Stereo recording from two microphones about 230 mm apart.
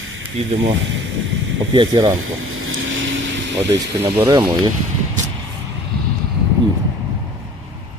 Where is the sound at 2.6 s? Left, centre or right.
Right.